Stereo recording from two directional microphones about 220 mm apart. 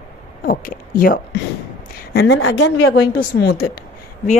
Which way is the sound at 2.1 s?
50° left (ahead or behind).